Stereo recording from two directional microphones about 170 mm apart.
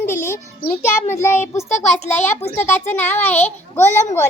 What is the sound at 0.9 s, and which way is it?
A child's voice, 15° left (ahead or behind).